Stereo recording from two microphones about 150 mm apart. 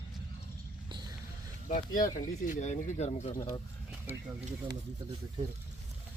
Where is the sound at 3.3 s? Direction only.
25° left (ahead or behind).